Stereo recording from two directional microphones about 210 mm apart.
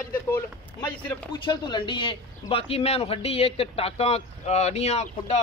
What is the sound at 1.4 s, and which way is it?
A man's voice, 20° left (ahead or behind).